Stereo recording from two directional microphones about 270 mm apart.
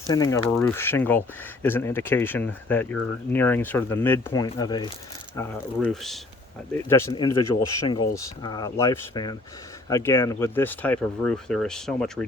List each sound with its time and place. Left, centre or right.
0.1 s speech: centre
5.4 s speech: centre